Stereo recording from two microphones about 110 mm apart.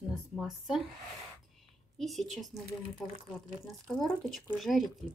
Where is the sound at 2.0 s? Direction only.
Centre (ahead or behind).